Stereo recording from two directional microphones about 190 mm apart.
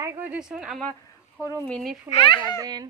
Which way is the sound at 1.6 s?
5° left (ahead or behind).